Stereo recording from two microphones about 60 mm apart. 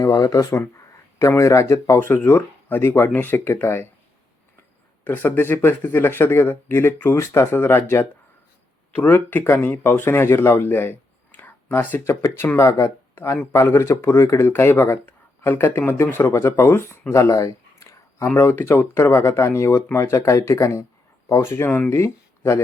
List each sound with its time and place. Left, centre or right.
0.0 s speech: left
1.4 s speech: left
2.0 s speech: left
5.0 s speech: left
5.4 s speech: left
13.1 s speech: left
17.1 s a sound: left
18.3 s speech: left
18.9 s speech: left
21.4 s speech: left
21.9 s speech: left